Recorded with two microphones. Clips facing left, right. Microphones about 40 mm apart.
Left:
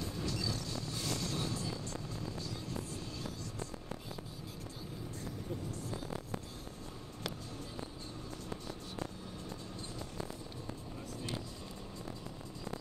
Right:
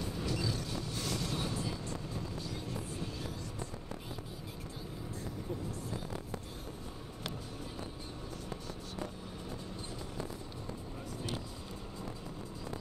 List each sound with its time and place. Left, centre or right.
0.0 s vehicle: right